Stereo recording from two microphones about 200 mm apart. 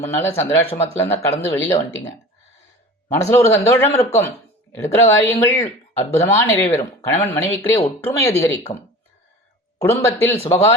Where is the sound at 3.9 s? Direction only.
30° left (ahead or behind).